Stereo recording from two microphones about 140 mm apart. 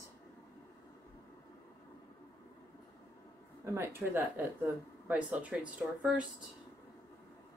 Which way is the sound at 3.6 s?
20° right (ahead or behind).